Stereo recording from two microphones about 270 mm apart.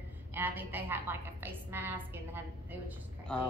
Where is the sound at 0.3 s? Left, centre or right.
Centre.